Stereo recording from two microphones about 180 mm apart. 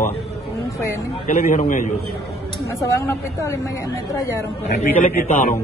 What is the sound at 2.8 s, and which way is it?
Speech, 15° left (ahead or behind).